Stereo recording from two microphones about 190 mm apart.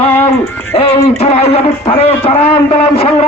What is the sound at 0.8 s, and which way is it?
Speech, 30° left (ahead or behind).